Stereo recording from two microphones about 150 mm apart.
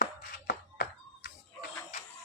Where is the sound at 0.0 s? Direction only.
90° left.